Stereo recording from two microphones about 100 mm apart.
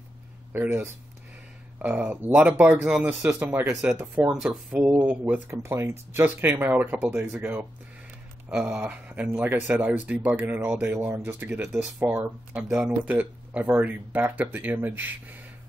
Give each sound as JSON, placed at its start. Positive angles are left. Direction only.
{"t": 0.5, "sound": "speech", "side_deg": -20}
{"t": 5.5, "sound": "speech", "side_deg": -30}
{"t": 8.5, "sound": "speech", "side_deg": -10}
{"t": 12.5, "sound": "speech", "side_deg": -5}